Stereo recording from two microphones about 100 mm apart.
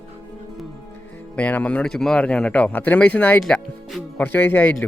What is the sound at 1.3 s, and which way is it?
Speech, 15° left (ahead or behind).